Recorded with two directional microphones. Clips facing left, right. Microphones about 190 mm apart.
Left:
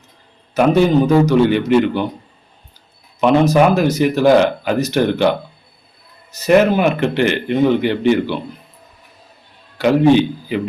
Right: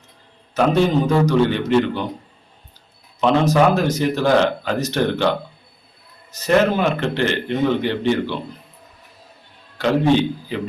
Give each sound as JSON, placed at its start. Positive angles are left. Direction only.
{"t": 0.5, "sound": "speech", "side_deg": 10}
{"t": 3.2, "sound": "speech", "side_deg": 10}
{"t": 6.3, "sound": "speech", "side_deg": 10}
{"t": 9.7, "sound": "a man's voice", "side_deg": 10}